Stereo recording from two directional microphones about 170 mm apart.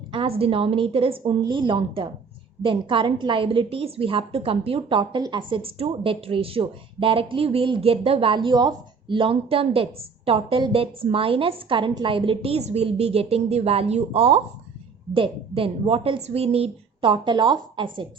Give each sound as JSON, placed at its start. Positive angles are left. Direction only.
{"t": 0.1, "sound": "speech", "side_deg": -35}